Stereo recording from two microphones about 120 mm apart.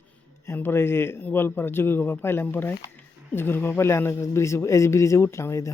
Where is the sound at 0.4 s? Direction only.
20° left (ahead or behind).